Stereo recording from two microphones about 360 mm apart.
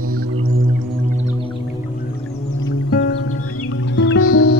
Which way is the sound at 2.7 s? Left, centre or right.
Left.